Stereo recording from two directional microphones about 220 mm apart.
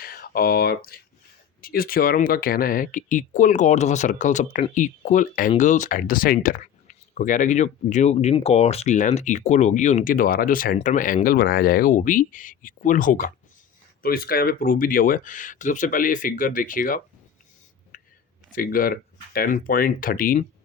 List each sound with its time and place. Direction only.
0.0 s speech: 40° left (ahead or behind)
17.9 s a sound: 40° left (ahead or behind)
18.5 s speech: 40° left (ahead or behind)